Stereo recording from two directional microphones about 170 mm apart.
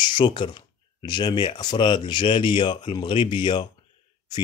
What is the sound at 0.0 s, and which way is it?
A man's voice, 25° left (ahead or behind).